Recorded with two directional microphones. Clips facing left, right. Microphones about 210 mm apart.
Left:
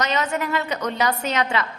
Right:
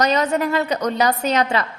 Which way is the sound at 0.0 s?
35° right (ahead or behind).